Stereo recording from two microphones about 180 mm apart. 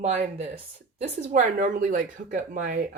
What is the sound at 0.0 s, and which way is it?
Speech, 40° right (ahead or behind).